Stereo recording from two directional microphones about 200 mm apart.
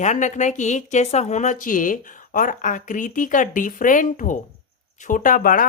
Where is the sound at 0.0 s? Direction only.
35° left (ahead or behind).